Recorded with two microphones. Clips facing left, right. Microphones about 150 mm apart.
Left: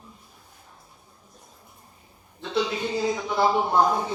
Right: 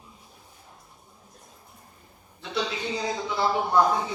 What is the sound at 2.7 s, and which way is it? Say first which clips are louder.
Speech: left 4 dB; 50° left (ahead or behind).